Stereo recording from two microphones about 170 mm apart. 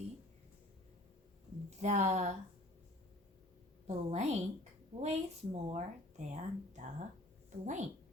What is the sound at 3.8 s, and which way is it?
A woman's voice, 40° right (ahead or behind).